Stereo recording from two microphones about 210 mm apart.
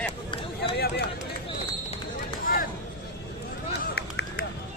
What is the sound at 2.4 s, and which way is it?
Vehicle, 40° left (ahead or behind).